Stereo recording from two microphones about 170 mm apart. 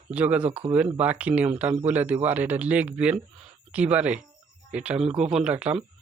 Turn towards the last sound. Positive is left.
turn(degrees=-5)  # may be behind; listen again after turning